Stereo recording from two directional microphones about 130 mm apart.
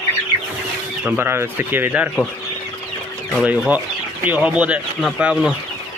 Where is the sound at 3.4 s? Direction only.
10° right (ahead or behind).